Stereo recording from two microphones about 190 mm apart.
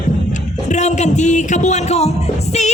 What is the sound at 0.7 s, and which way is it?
Music, 40° left (ahead or behind).